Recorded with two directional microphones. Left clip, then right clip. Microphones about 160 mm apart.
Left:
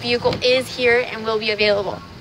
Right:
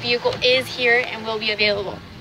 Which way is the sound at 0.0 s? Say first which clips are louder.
Left 1 dB; 35° left (ahead or behind).